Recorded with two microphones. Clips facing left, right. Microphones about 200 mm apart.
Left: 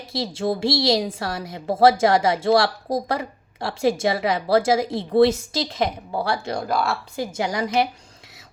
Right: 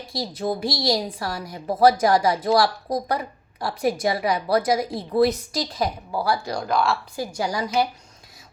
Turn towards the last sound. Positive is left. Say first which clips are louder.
# left 1 dB
turn(degrees=25)  # may be behind; listen again after turning